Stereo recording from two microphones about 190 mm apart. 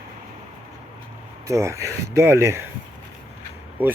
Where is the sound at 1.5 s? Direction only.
15° right (ahead or behind).